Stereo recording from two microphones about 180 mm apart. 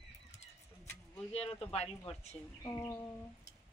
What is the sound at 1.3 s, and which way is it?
Speech, 30° left (ahead or behind).